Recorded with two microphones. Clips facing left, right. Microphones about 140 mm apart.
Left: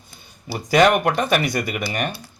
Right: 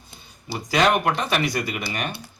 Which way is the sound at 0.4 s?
45° left (ahead or behind).